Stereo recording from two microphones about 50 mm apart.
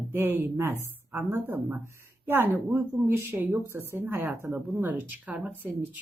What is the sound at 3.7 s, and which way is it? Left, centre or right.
Speech, right.